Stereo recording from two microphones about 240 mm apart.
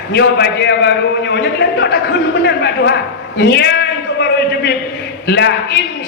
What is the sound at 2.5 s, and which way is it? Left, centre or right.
Speech, left.